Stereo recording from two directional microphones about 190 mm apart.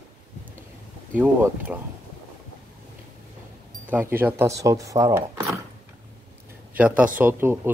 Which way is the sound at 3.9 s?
10° right (ahead or behind).